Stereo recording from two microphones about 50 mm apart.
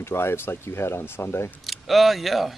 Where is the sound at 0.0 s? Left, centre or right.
Left.